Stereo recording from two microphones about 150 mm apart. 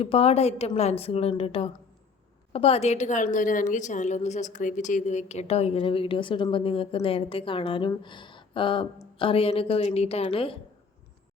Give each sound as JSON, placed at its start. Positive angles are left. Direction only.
{"t": 0.0, "sound": "a woman's voice", "side_deg": 40}